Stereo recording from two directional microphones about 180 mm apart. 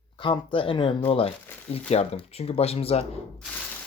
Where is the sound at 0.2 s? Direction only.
30° left (ahead or behind).